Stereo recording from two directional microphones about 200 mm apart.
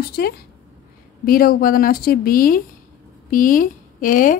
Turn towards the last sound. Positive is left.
turn(degrees=45)  # may be behind; listen again after turning